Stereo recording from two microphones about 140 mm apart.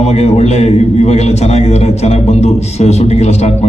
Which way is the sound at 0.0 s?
50° left (ahead or behind).